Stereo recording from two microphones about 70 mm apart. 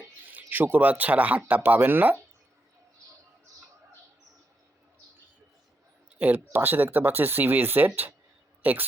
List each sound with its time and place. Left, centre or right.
0.3 s speech: right
6.1 s speech: right